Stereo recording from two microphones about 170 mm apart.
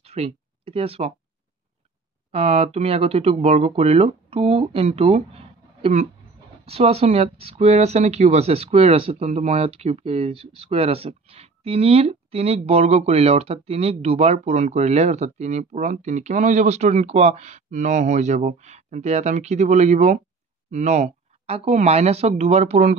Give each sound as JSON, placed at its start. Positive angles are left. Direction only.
{"t": 0.0, "sound": "speech", "side_deg": -35}
{"t": 2.3, "sound": "speech", "side_deg": -35}